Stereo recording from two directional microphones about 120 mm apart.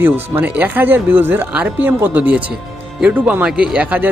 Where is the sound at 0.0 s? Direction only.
15° right (ahead or behind).